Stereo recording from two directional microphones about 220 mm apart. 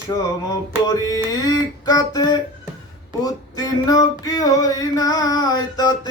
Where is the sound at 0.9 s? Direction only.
15° left (ahead or behind).